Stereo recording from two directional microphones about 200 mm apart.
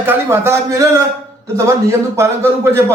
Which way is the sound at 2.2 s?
15° right (ahead or behind).